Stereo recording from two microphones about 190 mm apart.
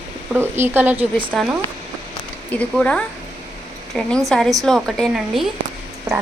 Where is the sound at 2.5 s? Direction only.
5° left (ahead or behind).